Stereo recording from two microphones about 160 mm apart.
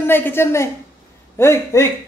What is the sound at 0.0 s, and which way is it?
Speech, 15° left (ahead or behind).